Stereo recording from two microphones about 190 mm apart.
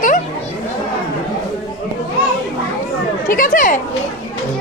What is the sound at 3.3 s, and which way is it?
Speech, 45° left (ahead or behind).